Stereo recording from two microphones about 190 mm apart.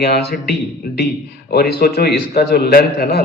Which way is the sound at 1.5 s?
55° left (ahead or behind).